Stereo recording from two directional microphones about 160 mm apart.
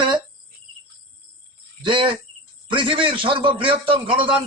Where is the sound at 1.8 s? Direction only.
30° right (ahead or behind).